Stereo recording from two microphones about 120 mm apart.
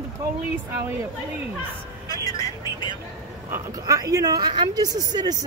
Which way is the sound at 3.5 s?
30° right (ahead or behind).